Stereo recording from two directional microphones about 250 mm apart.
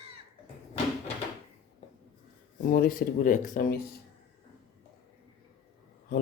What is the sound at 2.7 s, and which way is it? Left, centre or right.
Speech, left.